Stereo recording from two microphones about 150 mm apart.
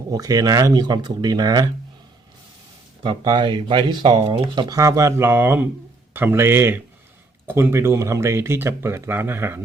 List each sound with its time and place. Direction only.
0.1 s speech: 25° right (ahead or behind)
3.0 s speech: 30° right (ahead or behind); by 9.6 s 15° right (ahead or behind)